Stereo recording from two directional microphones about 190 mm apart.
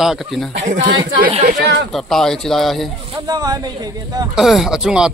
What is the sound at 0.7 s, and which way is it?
Speech, 75° right (ahead or behind).